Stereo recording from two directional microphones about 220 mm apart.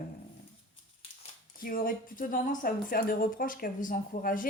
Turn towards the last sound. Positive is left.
turn(degrees=40)  # may be behind; listen again after turning